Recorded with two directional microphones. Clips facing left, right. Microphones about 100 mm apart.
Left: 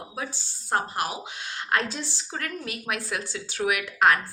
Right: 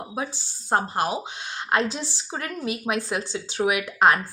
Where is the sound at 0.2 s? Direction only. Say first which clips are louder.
Right 4 dB; 20° right (ahead or behind).